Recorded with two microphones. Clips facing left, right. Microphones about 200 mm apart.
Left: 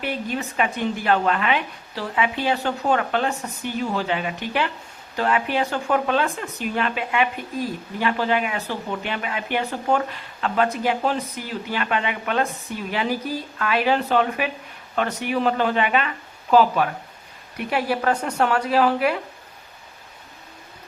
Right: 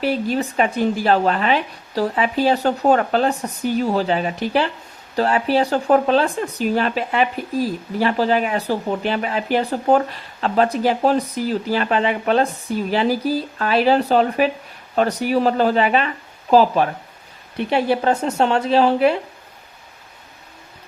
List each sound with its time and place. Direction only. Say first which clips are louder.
0.0 s speech: right 7 dB; 35° right (ahead or behind)